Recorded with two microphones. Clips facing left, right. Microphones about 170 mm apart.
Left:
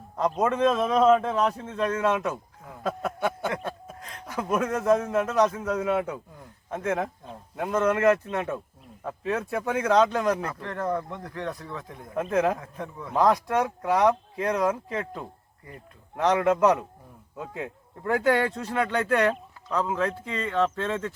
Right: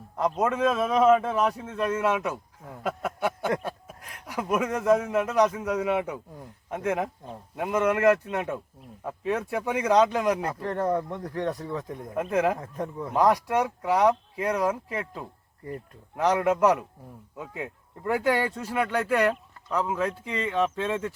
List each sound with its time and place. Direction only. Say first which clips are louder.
0.2 s speech: left 1 dB; 5° right (ahead or behind)
2.8 s a sound: left 1 dB; 10° right (ahead or behind)
3.6 s speech: left 1 dB; 10° right (ahead or behind)
10.4 s speech: right 3 dB; 35° right (ahead or behind)
12.1 s speech: left 1 dB; 10° right (ahead or behind)
12.5 s speech: right 4 dB; 40° right (ahead or behind)
13.1 s speech: even; 10° right (ahead or behind)